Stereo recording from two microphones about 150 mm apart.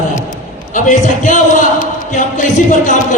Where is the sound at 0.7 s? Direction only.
55° left (ahead or behind).